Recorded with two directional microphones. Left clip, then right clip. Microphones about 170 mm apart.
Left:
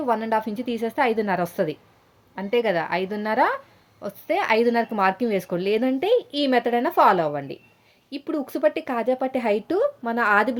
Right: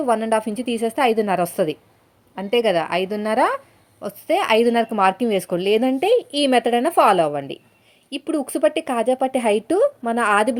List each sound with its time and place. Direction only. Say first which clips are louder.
0.0 s speech: right 4 dB; 25° right (ahead or behind)